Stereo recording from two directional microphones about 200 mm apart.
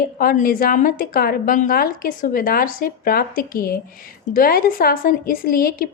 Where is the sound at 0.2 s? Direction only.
45° left (ahead or behind).